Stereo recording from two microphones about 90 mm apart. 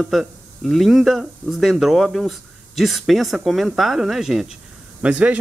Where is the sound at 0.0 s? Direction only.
5° right (ahead or behind).